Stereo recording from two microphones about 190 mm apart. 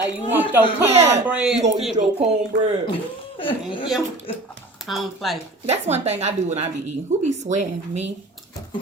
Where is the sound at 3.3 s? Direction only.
25° left (ahead or behind).